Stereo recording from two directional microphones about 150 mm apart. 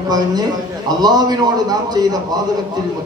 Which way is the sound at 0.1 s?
25° right (ahead or behind).